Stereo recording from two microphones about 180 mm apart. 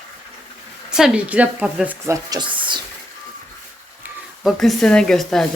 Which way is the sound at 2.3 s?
25° right (ahead or behind).